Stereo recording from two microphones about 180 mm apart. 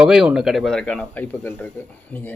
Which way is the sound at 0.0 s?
5° right (ahead or behind).